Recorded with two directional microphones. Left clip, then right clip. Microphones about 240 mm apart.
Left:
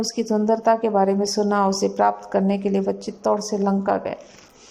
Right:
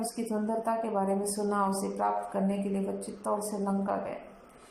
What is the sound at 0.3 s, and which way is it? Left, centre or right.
A woman's voice, left.